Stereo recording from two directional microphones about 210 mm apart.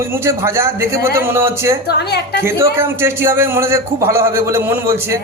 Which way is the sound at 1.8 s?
50° left (ahead or behind).